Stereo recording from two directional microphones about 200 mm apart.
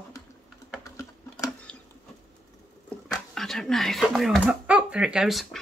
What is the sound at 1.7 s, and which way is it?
Patter, 5° left (ahead or behind).